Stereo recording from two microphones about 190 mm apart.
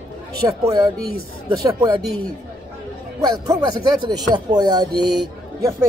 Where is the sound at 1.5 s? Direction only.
25° right (ahead or behind).